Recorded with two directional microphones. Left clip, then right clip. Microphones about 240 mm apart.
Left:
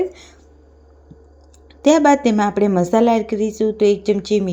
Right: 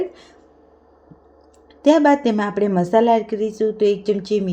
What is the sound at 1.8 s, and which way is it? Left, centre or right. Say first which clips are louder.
A woman's voice: left 1 dB; centre.